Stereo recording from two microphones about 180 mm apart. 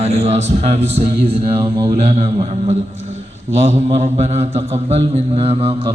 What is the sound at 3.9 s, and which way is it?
Mantra, 35° right (ahead or behind).